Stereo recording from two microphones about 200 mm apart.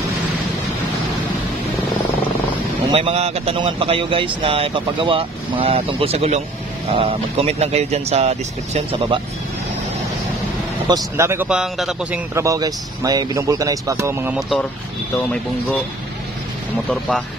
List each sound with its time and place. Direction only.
2.9 s speech: 30° right (ahead or behind)
10.9 s a man's voice: 15° right (ahead or behind)